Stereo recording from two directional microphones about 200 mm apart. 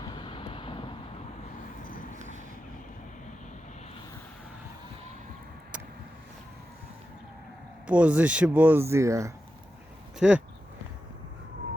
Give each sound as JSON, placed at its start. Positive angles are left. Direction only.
{"t": 0.0, "sound": "vehicle", "side_deg": 25}
{"t": 7.9, "sound": "a man's voice", "side_deg": -5}